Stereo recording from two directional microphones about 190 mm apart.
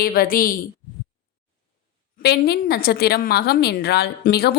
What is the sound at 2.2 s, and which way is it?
Speech, 60° left (ahead or behind).